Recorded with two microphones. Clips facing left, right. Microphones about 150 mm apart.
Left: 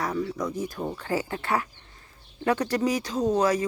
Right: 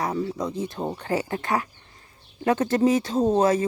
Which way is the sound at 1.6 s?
25° right (ahead or behind).